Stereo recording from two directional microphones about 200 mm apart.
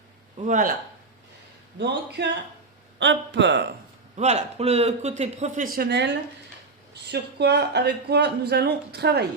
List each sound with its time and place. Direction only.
0.4 s a man's voice: 40° right (ahead or behind)
1.8 s speech: 60° right (ahead or behind)
4.2 s a man's voice: 35° right (ahead or behind); by 9.2 s 55° right (ahead or behind)